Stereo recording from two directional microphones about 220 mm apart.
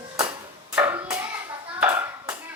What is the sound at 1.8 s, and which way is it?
Clapping, 10° right (ahead or behind).